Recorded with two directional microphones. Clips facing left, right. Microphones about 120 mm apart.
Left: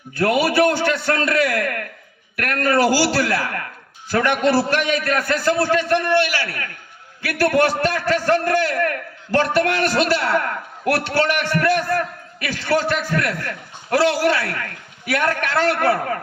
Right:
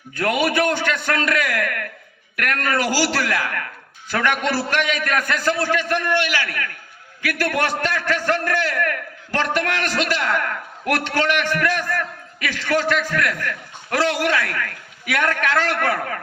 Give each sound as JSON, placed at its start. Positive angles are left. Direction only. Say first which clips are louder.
{"t": 0.4, "sound": "a man's voice", "louder": "left 3 dB", "side_deg": 35}